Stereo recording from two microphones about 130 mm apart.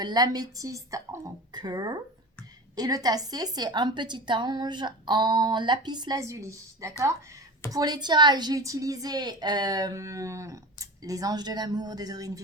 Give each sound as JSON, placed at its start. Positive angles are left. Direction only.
{"t": 0.0, "sound": "a woman's voice", "side_deg": -30}